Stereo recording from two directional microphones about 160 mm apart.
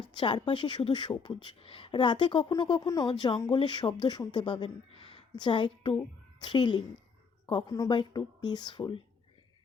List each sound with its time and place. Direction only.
0.1 s speech: 30° left (ahead or behind)